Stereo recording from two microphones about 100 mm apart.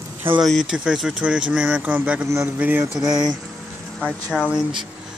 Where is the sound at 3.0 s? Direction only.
40° right (ahead or behind).